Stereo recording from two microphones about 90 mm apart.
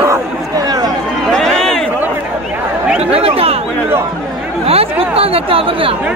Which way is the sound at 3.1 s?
90° right.